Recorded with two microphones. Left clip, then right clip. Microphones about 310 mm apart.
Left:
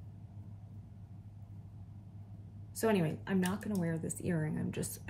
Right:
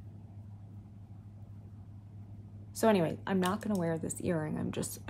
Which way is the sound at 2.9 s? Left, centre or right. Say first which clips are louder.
Right 4 dB; right.